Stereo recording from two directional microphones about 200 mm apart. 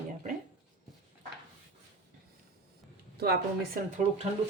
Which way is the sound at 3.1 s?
50° right (ahead or behind).